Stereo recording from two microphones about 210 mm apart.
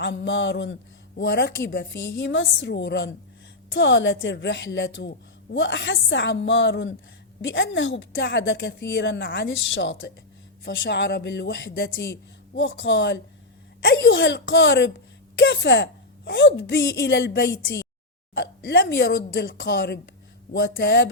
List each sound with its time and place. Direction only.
0.0 s a woman's voice: 55° left (ahead or behind)